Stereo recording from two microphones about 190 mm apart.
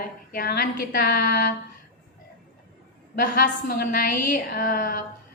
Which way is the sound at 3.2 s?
45° left (ahead or behind).